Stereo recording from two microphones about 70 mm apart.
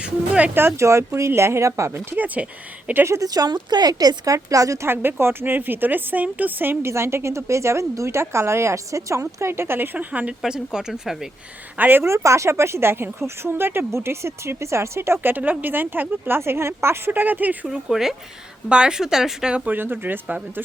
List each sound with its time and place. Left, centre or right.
0.0 s speech: centre
0.5 s speech: right
2.1 s speech: right
3.2 s a woman's voice: right
5.2 s speech: right
9.4 s speech: right
10.4 s speech: centre
11.8 s speech: right
12.0 s speech: right
17.1 s speech: right
17.7 s speech: centre
19.7 s speech: right